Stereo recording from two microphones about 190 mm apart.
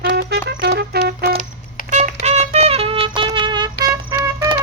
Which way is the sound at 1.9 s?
40° right (ahead or behind).